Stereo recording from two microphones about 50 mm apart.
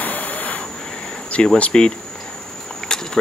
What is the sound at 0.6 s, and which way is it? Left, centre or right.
Insect, centre.